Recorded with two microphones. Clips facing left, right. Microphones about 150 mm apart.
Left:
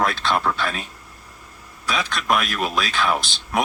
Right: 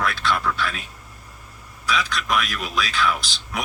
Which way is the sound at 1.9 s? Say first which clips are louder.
Left 2 dB; 55° left (ahead or behind).